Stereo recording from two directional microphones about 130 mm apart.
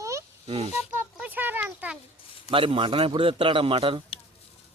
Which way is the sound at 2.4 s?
45° right (ahead or behind).